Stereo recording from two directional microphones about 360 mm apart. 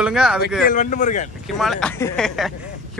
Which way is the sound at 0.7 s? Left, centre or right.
Left.